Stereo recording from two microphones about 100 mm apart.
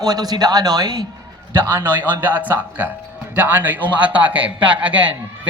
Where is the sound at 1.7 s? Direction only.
20° right (ahead or behind).